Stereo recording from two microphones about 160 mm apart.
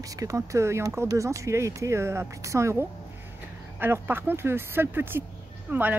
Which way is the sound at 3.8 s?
15° right (ahead or behind).